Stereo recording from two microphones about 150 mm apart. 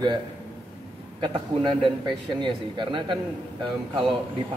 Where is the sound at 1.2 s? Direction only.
30° right (ahead or behind).